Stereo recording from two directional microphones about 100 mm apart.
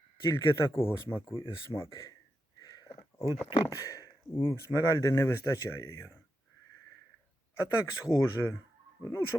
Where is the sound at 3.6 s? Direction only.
35° left (ahead or behind).